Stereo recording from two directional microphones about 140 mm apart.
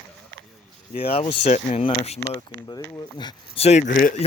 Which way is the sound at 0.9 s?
45° left (ahead or behind).